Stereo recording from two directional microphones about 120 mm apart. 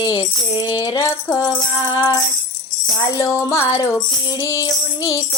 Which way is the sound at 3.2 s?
25° left (ahead or behind).